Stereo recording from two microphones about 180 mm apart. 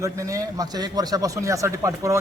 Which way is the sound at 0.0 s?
15° right (ahead or behind).